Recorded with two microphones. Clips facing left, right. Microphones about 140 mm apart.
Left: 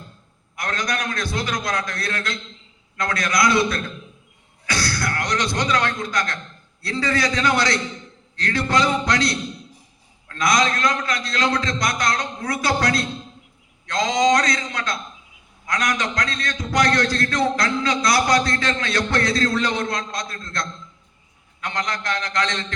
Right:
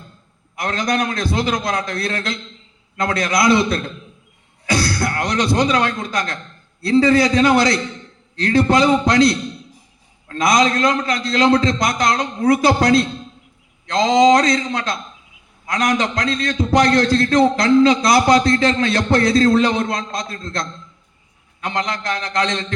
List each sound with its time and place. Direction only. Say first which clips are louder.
0.5 s a man's voice: right 6 dB; 25° right (ahead or behind)
4.8 s a man's voice: right 1 dB; 30° right (ahead or behind)
10.2 s a man's voice: right 4 dB; 30° right (ahead or behind)